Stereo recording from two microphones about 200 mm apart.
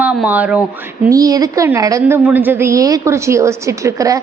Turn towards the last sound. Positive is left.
turn(degrees=-15)  # may be behind; listen again after turning